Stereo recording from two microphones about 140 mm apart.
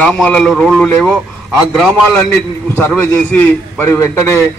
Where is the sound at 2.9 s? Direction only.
10° left (ahead or behind).